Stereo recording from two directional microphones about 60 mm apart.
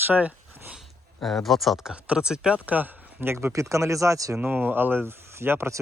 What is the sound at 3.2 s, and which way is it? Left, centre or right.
Speech, right.